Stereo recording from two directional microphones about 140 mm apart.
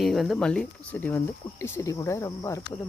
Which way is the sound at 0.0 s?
Centre (ahead or behind).